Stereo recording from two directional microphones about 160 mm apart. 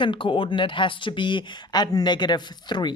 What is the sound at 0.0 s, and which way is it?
Speech, 30° left (ahead or behind).